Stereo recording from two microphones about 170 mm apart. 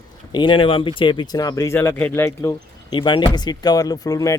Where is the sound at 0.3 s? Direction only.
30° left (ahead or behind).